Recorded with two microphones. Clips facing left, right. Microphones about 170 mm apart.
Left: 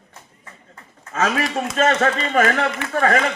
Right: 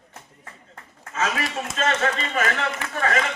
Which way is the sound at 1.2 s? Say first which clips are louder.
Left 5 dB; 50° left (ahead or behind).